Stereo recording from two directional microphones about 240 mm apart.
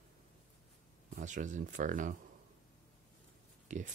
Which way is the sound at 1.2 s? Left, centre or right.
Right.